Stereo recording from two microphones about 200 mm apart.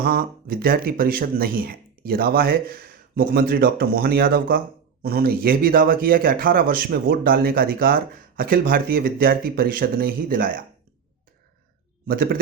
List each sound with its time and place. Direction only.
0.0 s speech: 45° right (ahead or behind)
12.0 s speech: 45° right (ahead or behind)